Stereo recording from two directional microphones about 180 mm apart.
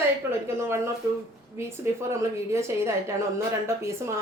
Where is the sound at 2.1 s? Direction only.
15° right (ahead or behind).